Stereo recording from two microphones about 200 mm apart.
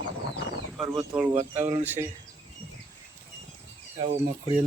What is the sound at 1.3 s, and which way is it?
Speech, 35° right (ahead or behind).